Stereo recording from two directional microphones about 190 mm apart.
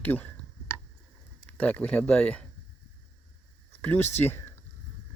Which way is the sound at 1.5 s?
5° left (ahead or behind).